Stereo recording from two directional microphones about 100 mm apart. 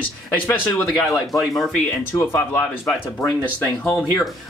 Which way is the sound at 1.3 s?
Centre (ahead or behind).